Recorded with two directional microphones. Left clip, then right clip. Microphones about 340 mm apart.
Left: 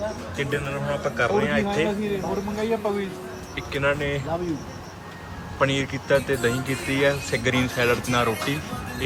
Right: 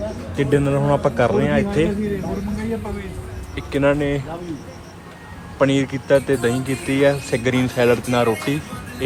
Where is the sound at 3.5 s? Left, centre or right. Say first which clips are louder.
Right 6 dB; centre.